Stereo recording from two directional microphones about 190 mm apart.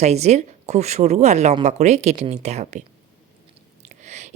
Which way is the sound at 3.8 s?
35° right (ahead or behind).